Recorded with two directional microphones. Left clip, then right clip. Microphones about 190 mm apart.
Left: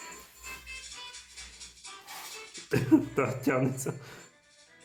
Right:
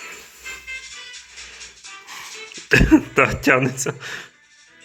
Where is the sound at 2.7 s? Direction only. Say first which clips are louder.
Right 11 dB; 15° right (ahead or behind).